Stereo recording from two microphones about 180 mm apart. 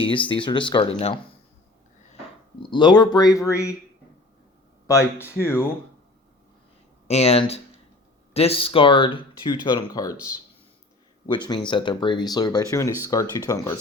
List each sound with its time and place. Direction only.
0.0 s speech: 25° left (ahead or behind)
2.6 s speech: 25° left (ahead or behind)
4.9 s speech: 15° left (ahead or behind)
7.1 s speech: 35° left (ahead or behind)
11.3 s speech: 25° left (ahead or behind)